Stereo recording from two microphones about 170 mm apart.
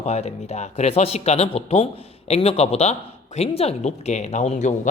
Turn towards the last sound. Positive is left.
turn(degrees=45)  # may be behind; listen again after turning